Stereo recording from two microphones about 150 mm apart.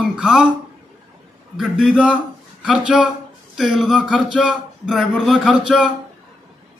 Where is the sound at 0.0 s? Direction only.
5° right (ahead or behind).